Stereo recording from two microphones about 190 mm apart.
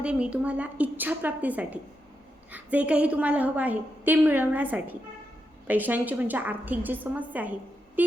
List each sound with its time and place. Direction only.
0.0 s a woman's voice: 5° right (ahead or behind)